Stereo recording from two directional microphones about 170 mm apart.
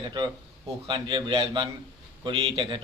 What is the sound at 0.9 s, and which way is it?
A man's voice, 25° right (ahead or behind).